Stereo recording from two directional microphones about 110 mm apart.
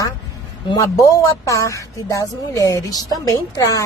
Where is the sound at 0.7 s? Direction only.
30° left (ahead or behind).